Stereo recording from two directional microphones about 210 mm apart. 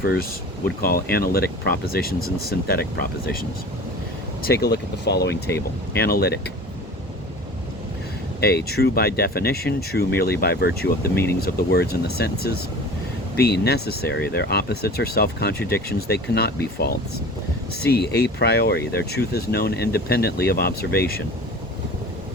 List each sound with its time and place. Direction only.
0.0 s speech: 45° left (ahead or behind)
4.4 s speech: 50° left (ahead or behind)
8.4 s speech: 50° left (ahead or behind)